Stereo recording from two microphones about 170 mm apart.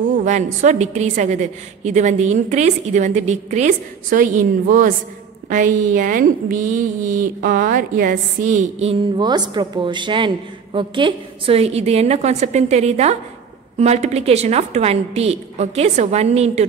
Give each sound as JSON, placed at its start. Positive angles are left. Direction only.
{"t": 0.0, "sound": "a woman's voice", "side_deg": -50}
{"t": 9.1, "sound": "a woman's voice", "side_deg": -25}